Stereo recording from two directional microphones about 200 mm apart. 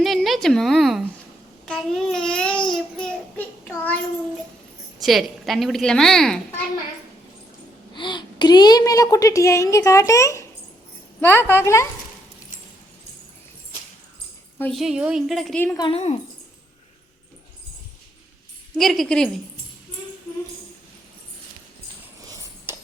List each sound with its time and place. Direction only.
0.0 s a woman's voice: centre (ahead or behind)
2.6 s child singing: 5° left (ahead or behind)
4.9 s a woman's voice: centre (ahead or behind)
7.9 s a woman's voice: 25° left (ahead or behind)
14.8 s a woman's voice: 5° right (ahead or behind)
15.8 s speech: 30° left (ahead or behind)
18.8 s a woman's voice: centre (ahead or behind)
22.7 s a sound: 10° right (ahead or behind)